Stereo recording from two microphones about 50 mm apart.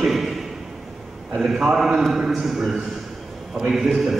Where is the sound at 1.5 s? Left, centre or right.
Centre.